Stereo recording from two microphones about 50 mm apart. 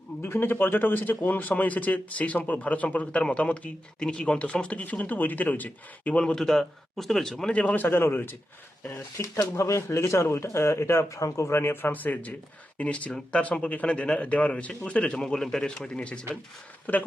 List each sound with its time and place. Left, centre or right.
0.2 s speech: left
4.8 s speech: left
6.1 s speech: centre
7.5 s speech: left
7.8 s speech: left
9.1 s speech: left
10.1 s speech: left
11.5 s speech: left
15.2 s speech: centre
16.9 s speech: left